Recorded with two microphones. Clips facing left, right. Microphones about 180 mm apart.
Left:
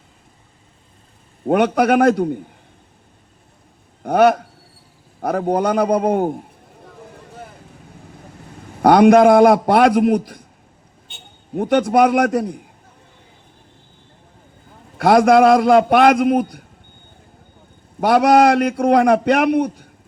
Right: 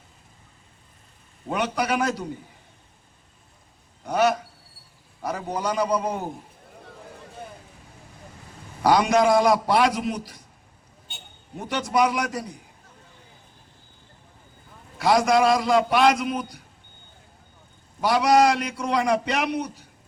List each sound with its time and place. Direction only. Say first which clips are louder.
1.5 s a man's voice: left 10 dB; 55° left (ahead or behind)
4.0 s a man's voice: left 8 dB; 55° left (ahead or behind)
8.8 s a man's voice: left 9 dB; 55° left (ahead or behind)
11.5 s a man's voice: left 9 dB; 55° left (ahead or behind)
14.9 s a man's voice: left 8 dB; 55° left (ahead or behind)
18.0 s a man's voice: left 6 dB; 55° left (ahead or behind)